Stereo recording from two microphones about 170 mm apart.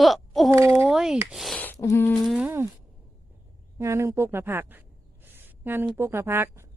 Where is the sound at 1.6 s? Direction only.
15° left (ahead or behind).